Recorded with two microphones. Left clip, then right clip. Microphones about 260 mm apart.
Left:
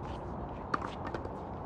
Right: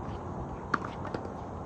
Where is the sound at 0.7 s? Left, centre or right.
Centre.